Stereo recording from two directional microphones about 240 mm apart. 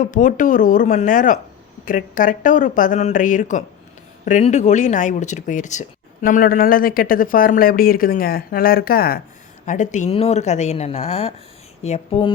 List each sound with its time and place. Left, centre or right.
0.0 s a woman's voice: left